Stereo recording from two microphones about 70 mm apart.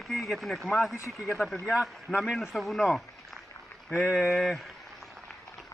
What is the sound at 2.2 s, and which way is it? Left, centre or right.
Speech, centre.